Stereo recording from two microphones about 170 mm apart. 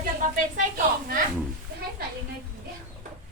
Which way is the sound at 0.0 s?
50° right (ahead or behind).